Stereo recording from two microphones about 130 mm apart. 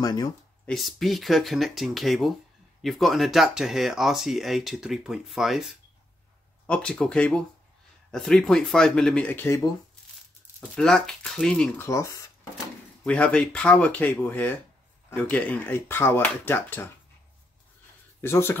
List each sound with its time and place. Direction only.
0.0 s speech: 30° left (ahead or behind)
0.7 s speech: centre (ahead or behind)
6.6 s speech: 10° left (ahead or behind)
10.8 s speech: 5° left (ahead or behind)
11.8 s speech: 20° left (ahead or behind)
13.0 s speech: 10° left (ahead or behind)
18.2 s speech: 20° left (ahead or behind)